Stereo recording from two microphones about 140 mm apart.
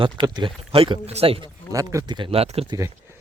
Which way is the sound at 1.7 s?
25° right (ahead or behind).